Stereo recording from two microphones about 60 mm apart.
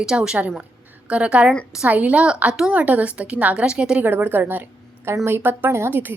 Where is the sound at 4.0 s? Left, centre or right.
Right.